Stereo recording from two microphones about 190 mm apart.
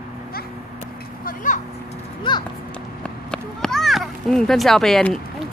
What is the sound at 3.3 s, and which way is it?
A child's voice, 5° left (ahead or behind).